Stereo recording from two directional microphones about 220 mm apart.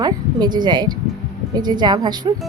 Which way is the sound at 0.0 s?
20° right (ahead or behind).